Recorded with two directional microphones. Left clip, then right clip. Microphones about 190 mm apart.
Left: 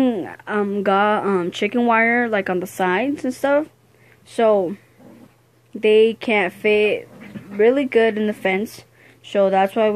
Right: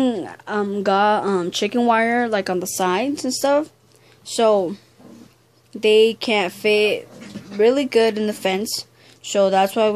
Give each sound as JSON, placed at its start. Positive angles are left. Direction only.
{"t": 0.0, "sound": "speech", "side_deg": 0}
{"t": 5.8, "sound": "speech", "side_deg": -5}